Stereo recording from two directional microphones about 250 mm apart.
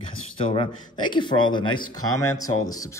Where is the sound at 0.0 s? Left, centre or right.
Left.